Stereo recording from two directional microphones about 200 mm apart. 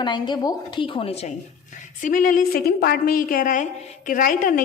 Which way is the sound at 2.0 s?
40° left (ahead or behind).